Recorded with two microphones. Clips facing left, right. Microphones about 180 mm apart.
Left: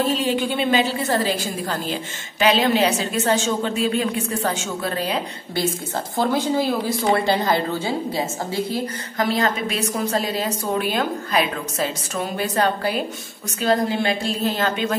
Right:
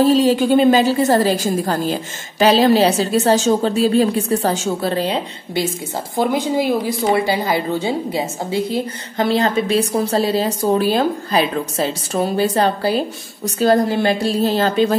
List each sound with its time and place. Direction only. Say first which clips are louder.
0.0 s a woman's voice: right 8 dB; 35° right (ahead or behind)
6.1 s a woman's voice: right 3 dB; 15° right (ahead or behind); by 13.0 s 30° right (ahead or behind)
13.6 s a woman's voice: right 5 dB; 40° right (ahead or behind)